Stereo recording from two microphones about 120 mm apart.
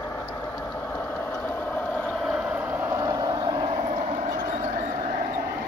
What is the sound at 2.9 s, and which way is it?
Vehicle, 30° right (ahead or behind).